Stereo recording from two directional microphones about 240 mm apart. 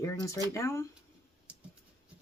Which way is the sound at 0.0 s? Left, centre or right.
Centre.